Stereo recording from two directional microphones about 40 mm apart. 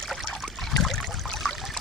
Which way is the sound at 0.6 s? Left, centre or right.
Centre.